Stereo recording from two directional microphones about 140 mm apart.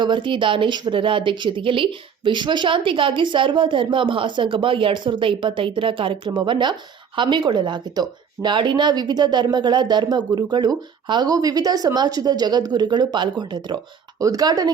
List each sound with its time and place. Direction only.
0.0 s speech: 35° right (ahead or behind)